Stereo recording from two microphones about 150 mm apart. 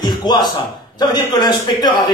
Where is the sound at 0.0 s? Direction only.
30° left (ahead or behind).